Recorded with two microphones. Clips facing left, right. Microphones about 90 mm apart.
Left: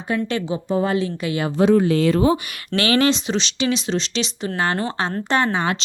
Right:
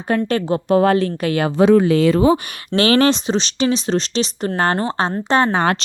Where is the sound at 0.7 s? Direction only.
75° right (ahead or behind).